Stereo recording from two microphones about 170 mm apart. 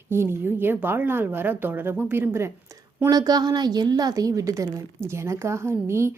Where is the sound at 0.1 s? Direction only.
15° right (ahead or behind).